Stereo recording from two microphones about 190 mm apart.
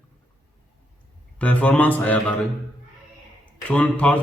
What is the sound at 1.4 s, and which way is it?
Speech, 10° left (ahead or behind).